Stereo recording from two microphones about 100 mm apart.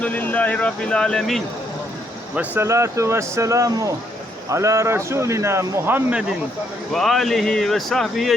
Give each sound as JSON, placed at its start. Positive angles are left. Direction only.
{"t": 0.0, "sound": "speech", "side_deg": 15}
{"t": 2.6, "sound": "a man's voice", "side_deg": -30}
{"t": 6.9, "sound": "speech", "side_deg": 5}